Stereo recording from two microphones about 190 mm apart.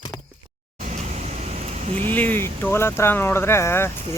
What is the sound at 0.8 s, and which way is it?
Vehicle, 40° right (ahead or behind).